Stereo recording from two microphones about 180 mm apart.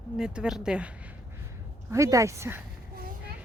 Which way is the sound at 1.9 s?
20° right (ahead or behind).